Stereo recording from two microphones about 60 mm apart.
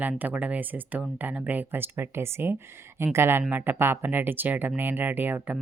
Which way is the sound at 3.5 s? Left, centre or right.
Right.